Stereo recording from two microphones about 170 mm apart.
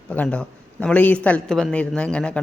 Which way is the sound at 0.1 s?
5° left (ahead or behind).